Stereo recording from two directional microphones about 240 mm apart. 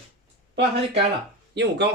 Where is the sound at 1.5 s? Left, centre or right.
Right.